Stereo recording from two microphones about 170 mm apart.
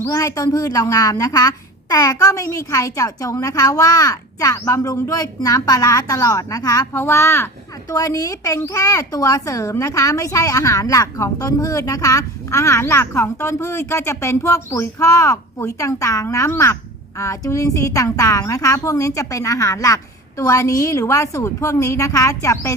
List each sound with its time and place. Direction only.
0.0 s a woman's voice: 20° left (ahead or behind)